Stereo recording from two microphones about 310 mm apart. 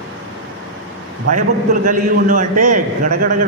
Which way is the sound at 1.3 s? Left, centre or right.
Right.